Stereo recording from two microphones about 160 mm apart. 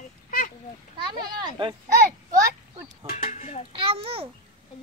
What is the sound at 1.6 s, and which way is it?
Speech, 30° right (ahead or behind).